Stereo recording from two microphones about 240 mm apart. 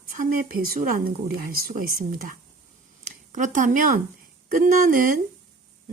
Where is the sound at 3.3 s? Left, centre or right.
Right.